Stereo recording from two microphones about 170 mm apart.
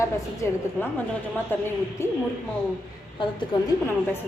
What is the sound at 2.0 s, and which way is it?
Speech, 15° left (ahead or behind).